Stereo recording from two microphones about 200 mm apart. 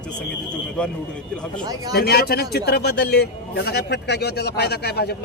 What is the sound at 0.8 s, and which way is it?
Speech, 5° left (ahead or behind).